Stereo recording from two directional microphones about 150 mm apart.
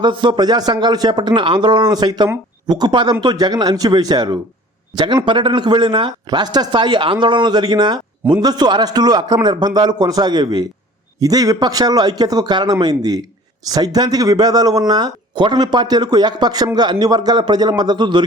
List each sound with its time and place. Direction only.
0.0 s speech: 30° right (ahead or behind)